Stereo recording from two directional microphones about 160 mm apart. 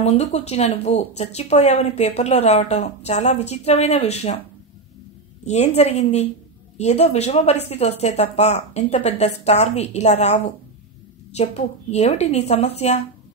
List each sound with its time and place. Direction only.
0.0 s speech: 40° left (ahead or behind)
5.4 s speech: 45° left (ahead or behind)